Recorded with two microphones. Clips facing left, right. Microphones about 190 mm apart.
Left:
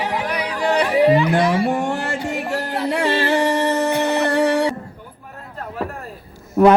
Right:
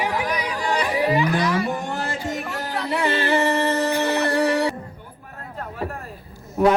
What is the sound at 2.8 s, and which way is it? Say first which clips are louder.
Music: left 3 dB; 70° left (ahead or behind).